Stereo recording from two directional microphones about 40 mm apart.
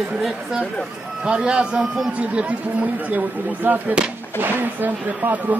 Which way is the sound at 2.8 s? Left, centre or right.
Right.